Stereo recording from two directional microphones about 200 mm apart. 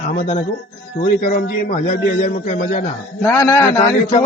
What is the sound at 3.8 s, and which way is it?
Speech, 35° left (ahead or behind).